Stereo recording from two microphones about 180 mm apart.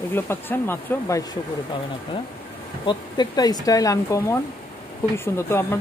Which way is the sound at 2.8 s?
25° left (ahead or behind).